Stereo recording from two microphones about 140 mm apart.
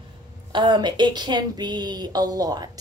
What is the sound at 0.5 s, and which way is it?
Speech, 35° right (ahead or behind).